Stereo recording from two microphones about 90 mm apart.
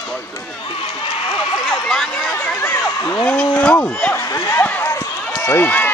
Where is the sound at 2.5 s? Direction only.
25° left (ahead or behind).